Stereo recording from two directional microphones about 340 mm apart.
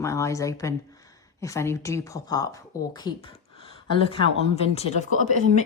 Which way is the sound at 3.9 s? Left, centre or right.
Centre.